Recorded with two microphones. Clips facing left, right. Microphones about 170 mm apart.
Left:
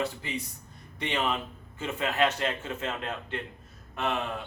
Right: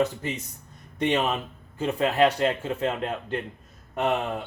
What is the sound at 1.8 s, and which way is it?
Speech, 35° right (ahead or behind).